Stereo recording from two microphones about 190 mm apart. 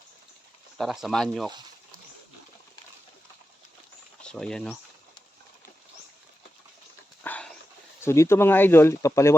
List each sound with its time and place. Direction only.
0.8 s speech: centre (ahead or behind)
1.5 s a sound: 20° right (ahead or behind)
4.2 s speech: 5° left (ahead or behind)
7.3 s dog: 5° left (ahead or behind)
8.0 s speech: 15° left (ahead or behind)